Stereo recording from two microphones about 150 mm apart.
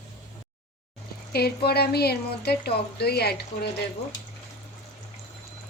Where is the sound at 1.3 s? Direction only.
90° left.